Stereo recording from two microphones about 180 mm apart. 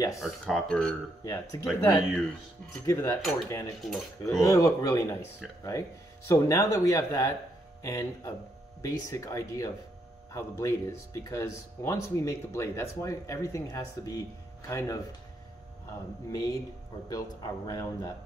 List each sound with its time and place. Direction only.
0.2 s speech: centre (ahead or behind)
1.2 s speech: 15° left (ahead or behind)
3.8 s speech: centre (ahead or behind)
4.4 s speech: 15° left (ahead or behind)
16.3 s a man's voice: 20° left (ahead or behind)